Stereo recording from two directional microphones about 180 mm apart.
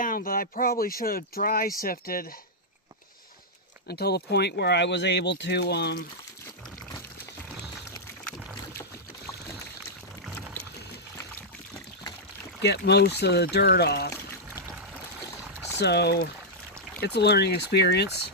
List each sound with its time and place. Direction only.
0.0 s speech: 50° left (ahead or behind)
3.8 s speech: 65° left (ahead or behind)
7.9 s a sound: 15° left (ahead or behind)
12.6 s speech: 65° left (ahead or behind)
15.8 s speech: 65° left (ahead or behind)